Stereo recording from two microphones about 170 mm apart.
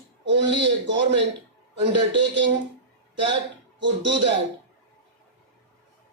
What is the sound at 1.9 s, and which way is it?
Speech, 30° right (ahead or behind).